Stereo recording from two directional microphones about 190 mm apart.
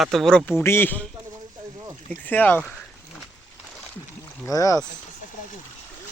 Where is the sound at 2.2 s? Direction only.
10° left (ahead or behind).